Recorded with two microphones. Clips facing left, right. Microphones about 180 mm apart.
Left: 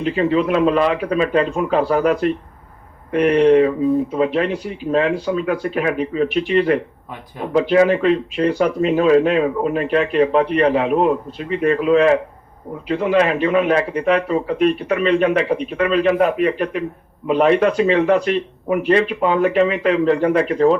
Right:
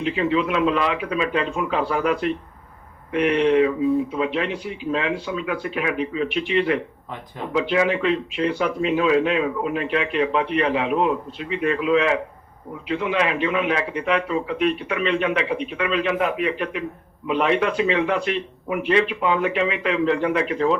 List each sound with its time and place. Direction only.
0.0 s speech: 45° left (ahead or behind)